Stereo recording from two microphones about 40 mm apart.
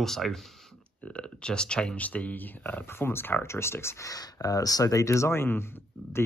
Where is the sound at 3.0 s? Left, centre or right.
Left.